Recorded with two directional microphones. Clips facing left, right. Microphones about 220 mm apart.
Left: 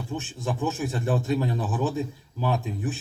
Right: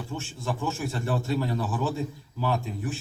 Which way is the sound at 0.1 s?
15° left (ahead or behind).